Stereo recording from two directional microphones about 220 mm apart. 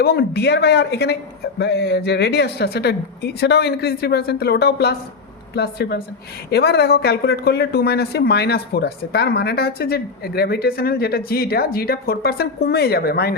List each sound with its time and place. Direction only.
0.0 s speech: 45° left (ahead or behind)